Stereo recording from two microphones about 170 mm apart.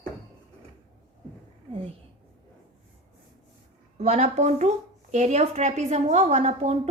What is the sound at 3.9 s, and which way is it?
A woman's voice, 40° right (ahead or behind).